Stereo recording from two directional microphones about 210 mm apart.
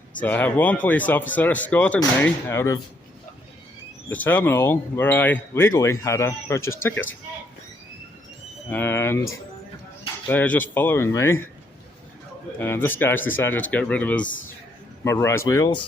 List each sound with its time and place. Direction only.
0.2 s speech: 5° left (ahead or behind)
4.1 s speech: 10° left (ahead or behind)
8.7 s speech: 10° left (ahead or behind)
10.2 s speech: 10° left (ahead or behind)
12.5 s speech: 10° left (ahead or behind)